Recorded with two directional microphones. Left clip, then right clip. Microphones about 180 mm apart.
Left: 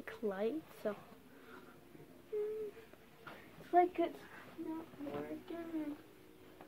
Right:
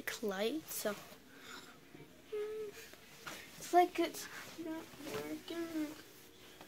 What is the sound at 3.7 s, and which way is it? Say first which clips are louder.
Speech: right 1 dB; 20° right (ahead or behind).